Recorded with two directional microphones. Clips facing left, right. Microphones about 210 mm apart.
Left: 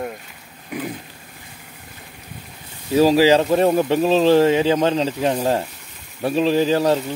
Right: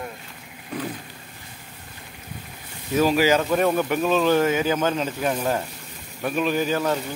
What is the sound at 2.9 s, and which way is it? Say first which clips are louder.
Speech: left 5 dB; 35° left (ahead or behind).